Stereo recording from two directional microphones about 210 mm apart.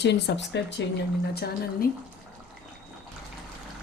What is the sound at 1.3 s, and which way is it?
Speech, 45° left (ahead or behind).